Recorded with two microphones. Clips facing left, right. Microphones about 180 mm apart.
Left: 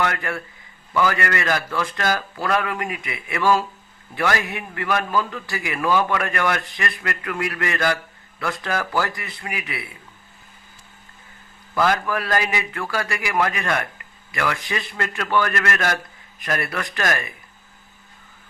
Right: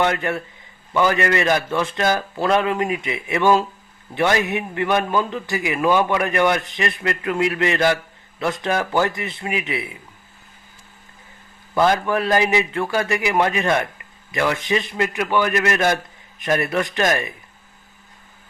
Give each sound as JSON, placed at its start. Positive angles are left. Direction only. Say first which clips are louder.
{"t": 0.0, "sound": "a man's voice", "louder": "right 4 dB", "side_deg": -25}
{"t": 11.7, "sound": "a man's voice", "louder": "right 3 dB", "side_deg": -25}